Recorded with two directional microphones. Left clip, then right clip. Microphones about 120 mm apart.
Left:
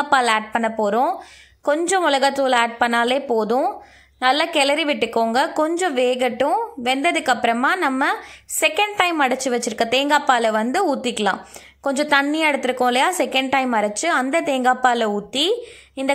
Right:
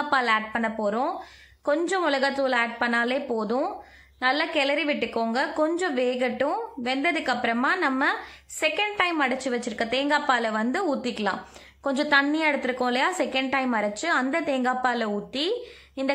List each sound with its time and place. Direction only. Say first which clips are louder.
0.1 s a woman's voice: left 6 dB; 30° left (ahead or behind)